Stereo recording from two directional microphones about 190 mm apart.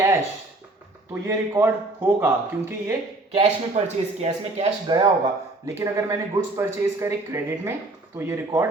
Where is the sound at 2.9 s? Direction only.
25° right (ahead or behind).